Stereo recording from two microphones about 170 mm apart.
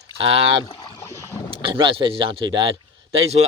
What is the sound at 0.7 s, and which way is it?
Boat, 25° left (ahead or behind).